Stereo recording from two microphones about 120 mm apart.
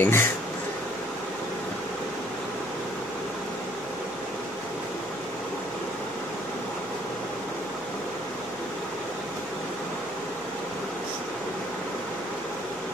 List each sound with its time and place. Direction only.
0.0 s speech: 20° left (ahead or behind)